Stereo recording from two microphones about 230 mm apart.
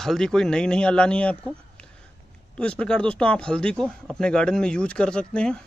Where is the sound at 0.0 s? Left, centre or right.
Centre.